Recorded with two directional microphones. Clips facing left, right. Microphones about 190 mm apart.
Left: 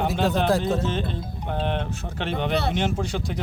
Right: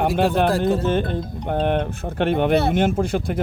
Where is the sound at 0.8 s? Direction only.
55° right (ahead or behind).